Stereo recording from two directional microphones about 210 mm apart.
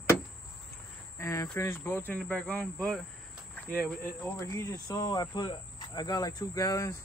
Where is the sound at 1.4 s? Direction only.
10° left (ahead or behind).